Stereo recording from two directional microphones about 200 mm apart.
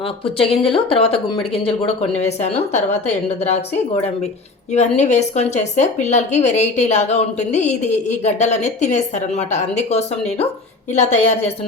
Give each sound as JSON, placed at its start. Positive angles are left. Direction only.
{"t": 0.3, "sound": "speech", "side_deg": 30}
{"t": 4.7, "sound": "speech", "side_deg": 35}